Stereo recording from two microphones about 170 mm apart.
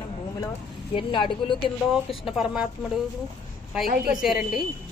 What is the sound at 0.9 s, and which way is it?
Speech, 30° left (ahead or behind).